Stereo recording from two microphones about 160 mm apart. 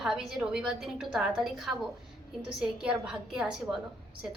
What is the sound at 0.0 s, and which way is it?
A woman's voice, 5° right (ahead or behind).